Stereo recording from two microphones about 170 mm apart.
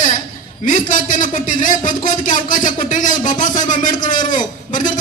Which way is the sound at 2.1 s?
50° left (ahead or behind).